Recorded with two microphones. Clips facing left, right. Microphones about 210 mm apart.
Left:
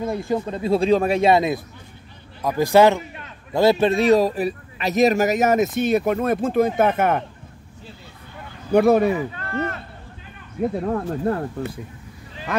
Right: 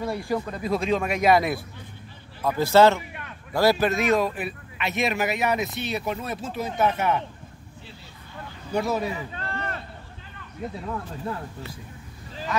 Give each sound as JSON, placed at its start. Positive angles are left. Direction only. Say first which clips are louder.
{"t": 0.0, "sound": "a man's voice", "louder": "left 4 dB", "side_deg": 20}
{"t": 8.7, "sound": "speech", "louder": "left 10 dB", "side_deg": 60}
{"t": 10.6, "sound": "speech", "louder": "left 10 dB", "side_deg": 55}